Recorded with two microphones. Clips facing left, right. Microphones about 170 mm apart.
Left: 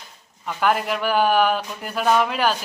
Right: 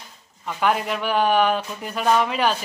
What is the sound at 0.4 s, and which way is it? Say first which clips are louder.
Speech: left 1 dB; centre (ahead or behind).